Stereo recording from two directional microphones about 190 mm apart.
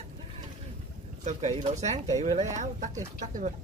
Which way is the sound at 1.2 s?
35° right (ahead or behind).